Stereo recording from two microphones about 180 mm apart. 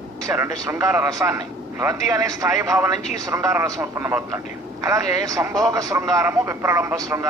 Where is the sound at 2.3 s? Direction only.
20° right (ahead or behind).